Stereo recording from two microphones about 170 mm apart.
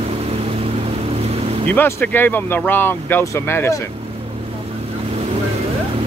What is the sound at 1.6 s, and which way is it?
Speech, 10° left (ahead or behind).